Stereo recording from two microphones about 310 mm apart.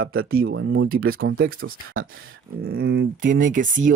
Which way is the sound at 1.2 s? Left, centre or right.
Right.